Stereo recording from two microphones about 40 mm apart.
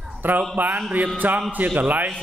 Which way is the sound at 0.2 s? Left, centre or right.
Right.